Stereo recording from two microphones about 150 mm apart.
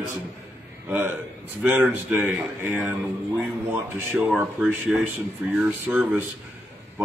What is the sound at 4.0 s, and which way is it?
Speech, 15° right (ahead or behind).